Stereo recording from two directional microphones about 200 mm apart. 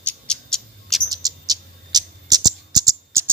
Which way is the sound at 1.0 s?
20° right (ahead or behind).